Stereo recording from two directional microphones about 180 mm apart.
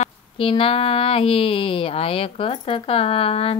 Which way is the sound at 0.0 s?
30° left (ahead or behind).